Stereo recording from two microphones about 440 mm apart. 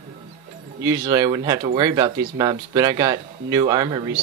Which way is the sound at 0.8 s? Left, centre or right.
Centre.